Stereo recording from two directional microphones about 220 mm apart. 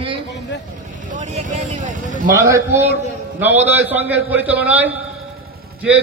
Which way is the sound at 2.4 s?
15° right (ahead or behind).